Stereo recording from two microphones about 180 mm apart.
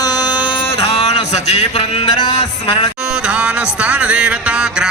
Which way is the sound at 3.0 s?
5° right (ahead or behind).